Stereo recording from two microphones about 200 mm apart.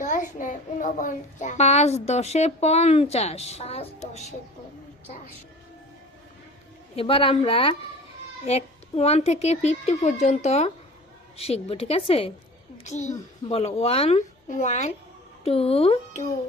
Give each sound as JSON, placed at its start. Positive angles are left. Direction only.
{"t": 0.0, "sound": "a child's voice", "side_deg": 40}
{"t": 7.0, "sound": "a woman's voice", "side_deg": 25}